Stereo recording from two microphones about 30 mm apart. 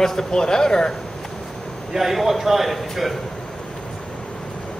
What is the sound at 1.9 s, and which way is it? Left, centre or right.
A man's voice, centre.